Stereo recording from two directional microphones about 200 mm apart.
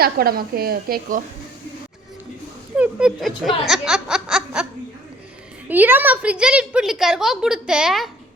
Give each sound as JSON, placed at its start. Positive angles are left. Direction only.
{"t": 0.0, "sound": "a woman's voice", "side_deg": -50}
{"t": 2.7, "sound": "speech", "side_deg": -5}
{"t": 5.6, "sound": "a woman's voice", "side_deg": -10}